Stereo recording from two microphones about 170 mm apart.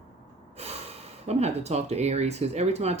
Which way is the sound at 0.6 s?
40° right (ahead or behind).